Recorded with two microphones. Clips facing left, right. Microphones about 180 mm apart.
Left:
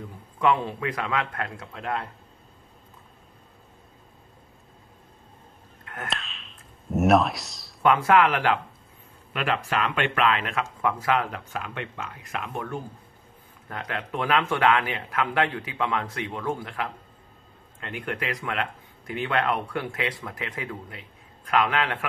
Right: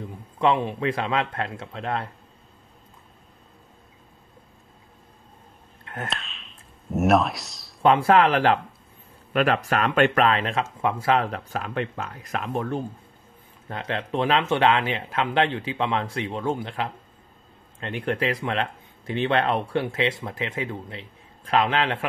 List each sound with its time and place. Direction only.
0.4 s speech: 25° right (ahead or behind)
6.0 s a sound: centre (ahead or behind)
7.8 s speech: 30° right (ahead or behind)